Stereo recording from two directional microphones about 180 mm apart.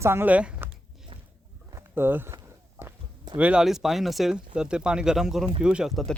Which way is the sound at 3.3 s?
5° right (ahead or behind).